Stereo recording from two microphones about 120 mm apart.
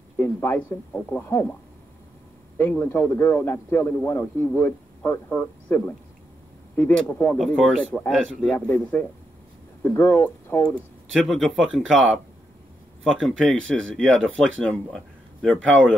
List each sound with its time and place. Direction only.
0.2 s a man's voice: 20° left (ahead or behind)
2.8 s a man's voice: 20° left (ahead or behind)
7.3 s speech: centre (ahead or behind)
11.2 s speech: centre (ahead or behind)